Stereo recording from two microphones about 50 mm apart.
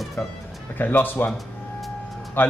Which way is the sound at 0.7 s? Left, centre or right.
Left.